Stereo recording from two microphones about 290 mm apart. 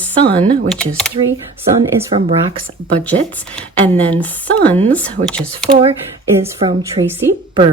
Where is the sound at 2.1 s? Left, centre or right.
Centre.